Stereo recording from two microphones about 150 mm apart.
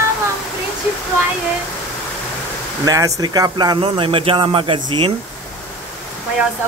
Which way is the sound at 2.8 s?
25° right (ahead or behind).